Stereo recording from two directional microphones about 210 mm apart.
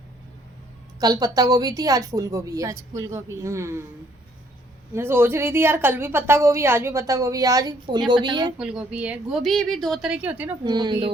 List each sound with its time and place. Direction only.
0.9 s a woman's voice: 15° right (ahead or behind)
4.9 s a woman's voice: 10° right (ahead or behind)
8.5 s a woman's voice: 5° right (ahead or behind)
10.6 s speech: 20° right (ahead or behind)